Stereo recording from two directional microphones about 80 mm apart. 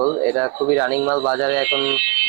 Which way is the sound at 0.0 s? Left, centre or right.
Centre.